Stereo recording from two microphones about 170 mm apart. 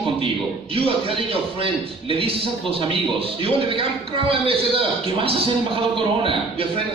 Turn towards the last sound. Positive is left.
turn(degrees=-35)  # may be behind; listen again after turning